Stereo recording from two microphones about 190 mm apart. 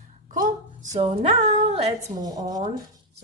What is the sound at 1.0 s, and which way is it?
Speech, 35° right (ahead or behind).